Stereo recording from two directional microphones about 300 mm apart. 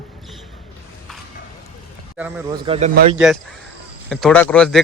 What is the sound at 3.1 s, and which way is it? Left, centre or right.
Speech, centre.